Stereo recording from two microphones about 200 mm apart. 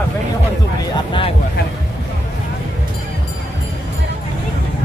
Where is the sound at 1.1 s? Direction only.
25° left (ahead or behind).